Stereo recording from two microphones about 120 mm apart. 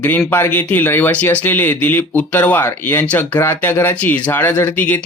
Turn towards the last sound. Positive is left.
turn(degrees=15)  # may be behind; listen again after turning